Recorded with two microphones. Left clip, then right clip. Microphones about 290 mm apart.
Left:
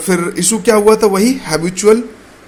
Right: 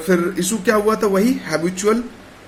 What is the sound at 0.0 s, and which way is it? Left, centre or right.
A man's voice, centre.